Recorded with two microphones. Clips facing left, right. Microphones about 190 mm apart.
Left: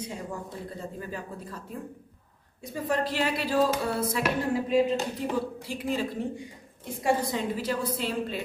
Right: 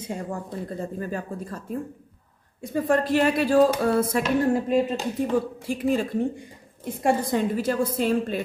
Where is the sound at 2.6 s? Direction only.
50° right (ahead or behind).